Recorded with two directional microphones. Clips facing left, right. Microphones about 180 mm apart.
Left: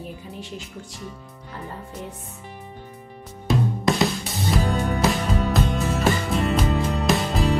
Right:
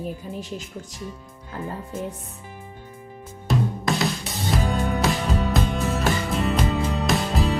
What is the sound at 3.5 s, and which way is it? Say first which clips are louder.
Music: left 2 dB; centre (ahead or behind).